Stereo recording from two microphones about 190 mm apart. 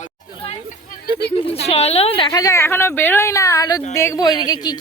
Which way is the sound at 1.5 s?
30° left (ahead or behind).